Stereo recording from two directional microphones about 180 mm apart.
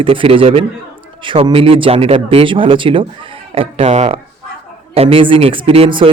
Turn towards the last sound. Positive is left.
turn(degrees=-30)  # may be behind; listen again after turning